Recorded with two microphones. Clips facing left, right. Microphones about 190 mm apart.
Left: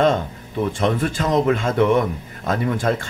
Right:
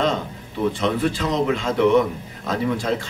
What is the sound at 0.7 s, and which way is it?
A man's voice, 50° left (ahead or behind).